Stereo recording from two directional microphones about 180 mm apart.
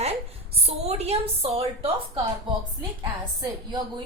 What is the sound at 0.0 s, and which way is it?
A woman's voice, 35° right (ahead or behind).